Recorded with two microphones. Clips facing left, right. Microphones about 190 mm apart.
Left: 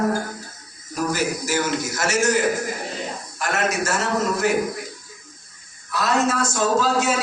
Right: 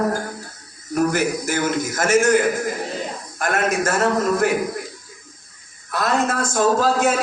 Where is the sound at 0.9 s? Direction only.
60° right (ahead or behind).